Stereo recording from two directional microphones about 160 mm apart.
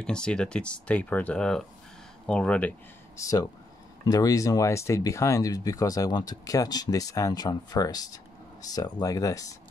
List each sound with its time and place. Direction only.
0.0 s speech: 5° left (ahead or behind)
3.2 s speech: 20° left (ahead or behind)